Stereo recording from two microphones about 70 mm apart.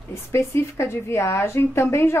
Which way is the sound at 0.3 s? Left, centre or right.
Left.